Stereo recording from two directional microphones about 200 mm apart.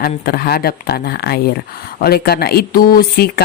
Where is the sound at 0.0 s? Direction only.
50° left (ahead or behind).